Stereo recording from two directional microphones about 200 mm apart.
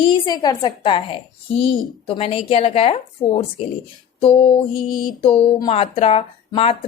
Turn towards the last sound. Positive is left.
turn(degrees=30)  # may be behind; listen again after turning